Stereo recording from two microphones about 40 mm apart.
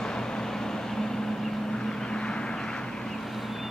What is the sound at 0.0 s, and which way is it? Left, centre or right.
Vehicle, centre.